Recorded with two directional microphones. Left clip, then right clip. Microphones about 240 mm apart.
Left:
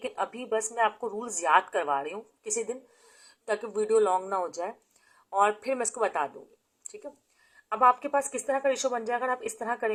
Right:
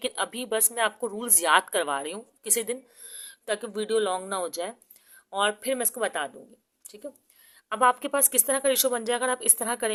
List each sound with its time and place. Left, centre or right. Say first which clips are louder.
0.0 s speech: right 2 dB; right
3.4 s speech: left 1 dB; right
7.7 s speech: even; right